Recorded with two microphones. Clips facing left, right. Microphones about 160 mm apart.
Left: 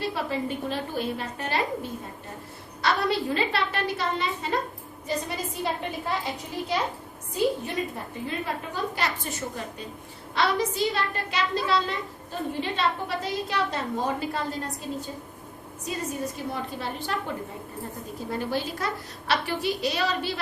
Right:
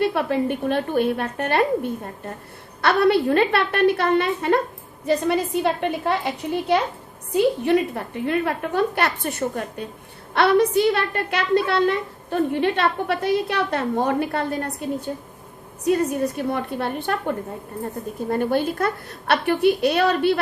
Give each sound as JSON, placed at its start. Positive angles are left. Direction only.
{"t": 0.0, "sound": "a woman's voice", "side_deg": -60}